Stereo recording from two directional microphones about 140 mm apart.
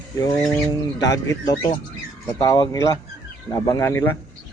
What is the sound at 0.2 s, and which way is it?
Speech, 30° left (ahead or behind).